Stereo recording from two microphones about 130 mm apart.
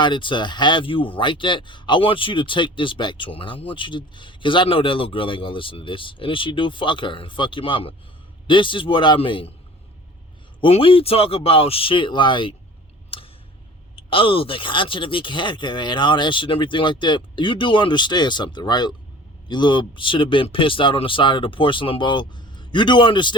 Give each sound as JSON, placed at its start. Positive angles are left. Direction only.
{"t": 0.0, "sound": "speech", "side_deg": 40}
{"t": 10.6, "sound": "speech", "side_deg": 45}
{"t": 13.1, "sound": "a sound", "side_deg": 45}
{"t": 13.9, "sound": "speech", "side_deg": 45}